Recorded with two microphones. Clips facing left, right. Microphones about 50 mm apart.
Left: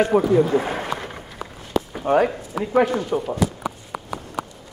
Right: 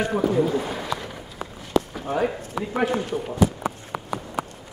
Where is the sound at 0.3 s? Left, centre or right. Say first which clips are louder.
Left 4 dB; left.